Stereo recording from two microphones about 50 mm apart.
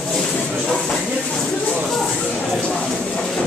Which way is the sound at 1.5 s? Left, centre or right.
Centre.